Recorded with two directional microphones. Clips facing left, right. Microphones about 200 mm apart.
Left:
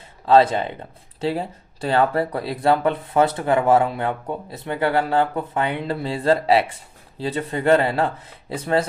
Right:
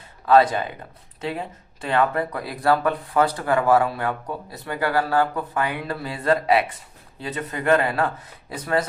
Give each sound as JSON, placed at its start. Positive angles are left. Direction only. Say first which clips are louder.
{"t": 0.3, "sound": "speech", "louder": "left 1 dB", "side_deg": 25}